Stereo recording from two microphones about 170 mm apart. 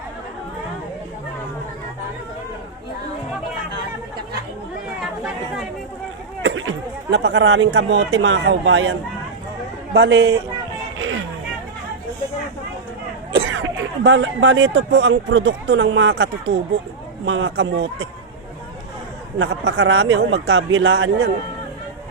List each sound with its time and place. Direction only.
7.1 s a man's voice: 90° right
13.3 s speech: 90° right
19.4 s speech: 90° right